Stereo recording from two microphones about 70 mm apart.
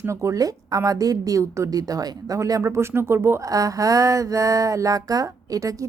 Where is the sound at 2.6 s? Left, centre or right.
Right.